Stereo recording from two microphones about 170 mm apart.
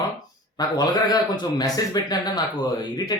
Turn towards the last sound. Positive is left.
turn(degrees=25)  # may be behind; listen again after turning